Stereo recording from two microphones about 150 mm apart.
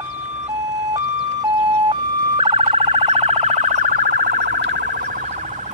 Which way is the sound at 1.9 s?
35° right (ahead or behind).